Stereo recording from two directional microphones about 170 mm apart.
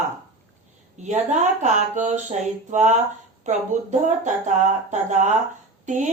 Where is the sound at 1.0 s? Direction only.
45° right (ahead or behind).